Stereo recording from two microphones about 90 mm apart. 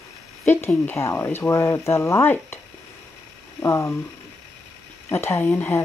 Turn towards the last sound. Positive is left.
turn(degrees=20)  # may be behind; listen again after turning